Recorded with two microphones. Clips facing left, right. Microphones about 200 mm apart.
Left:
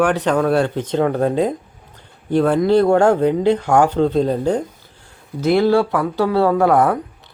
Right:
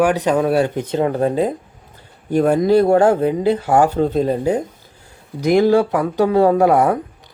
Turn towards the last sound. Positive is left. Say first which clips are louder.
# right 1 dB
turn(degrees=-15)  # may be behind; listen again after turning